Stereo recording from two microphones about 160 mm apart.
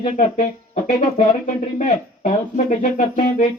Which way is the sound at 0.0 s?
45° left (ahead or behind).